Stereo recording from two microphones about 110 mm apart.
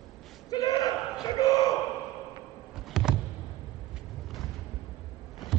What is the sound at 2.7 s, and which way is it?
Power windows, 5° right (ahead or behind).